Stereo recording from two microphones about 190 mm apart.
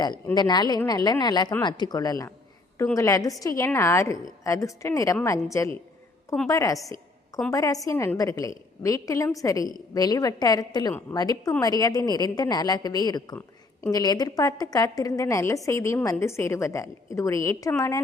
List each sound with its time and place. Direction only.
0.3 s a woman's voice: 20° left (ahead or behind)